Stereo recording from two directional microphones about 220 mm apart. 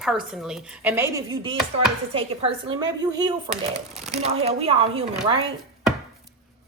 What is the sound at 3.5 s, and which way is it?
Speech, centre (ahead or behind).